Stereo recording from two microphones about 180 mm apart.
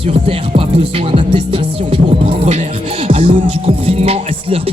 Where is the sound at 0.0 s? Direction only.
30° right (ahead or behind).